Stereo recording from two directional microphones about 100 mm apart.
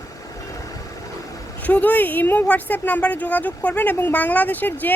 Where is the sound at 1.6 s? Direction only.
15° left (ahead or behind).